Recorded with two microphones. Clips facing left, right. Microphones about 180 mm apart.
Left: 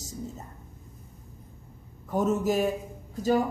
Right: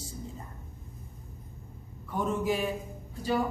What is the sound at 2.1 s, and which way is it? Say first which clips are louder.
Speech: left 4 dB; 45° left (ahead or behind).